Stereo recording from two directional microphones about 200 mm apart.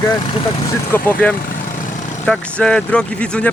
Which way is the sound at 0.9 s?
10° left (ahead or behind).